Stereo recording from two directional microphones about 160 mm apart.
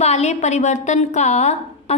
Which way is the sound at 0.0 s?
45° left (ahead or behind).